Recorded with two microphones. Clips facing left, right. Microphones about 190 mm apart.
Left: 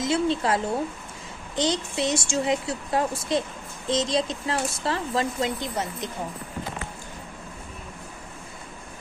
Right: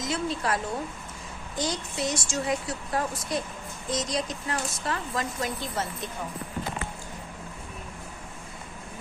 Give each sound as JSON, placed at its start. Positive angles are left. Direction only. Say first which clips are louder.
{"t": 0.0, "sound": "speech", "louder": "left 6 dB", "side_deg": 25}